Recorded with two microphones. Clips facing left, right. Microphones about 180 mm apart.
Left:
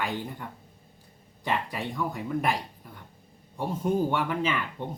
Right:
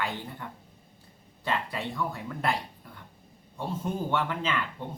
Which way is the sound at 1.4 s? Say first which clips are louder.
Left 1 dB; 15° left (ahead or behind).